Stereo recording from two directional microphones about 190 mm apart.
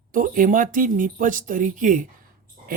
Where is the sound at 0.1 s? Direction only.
45° right (ahead or behind).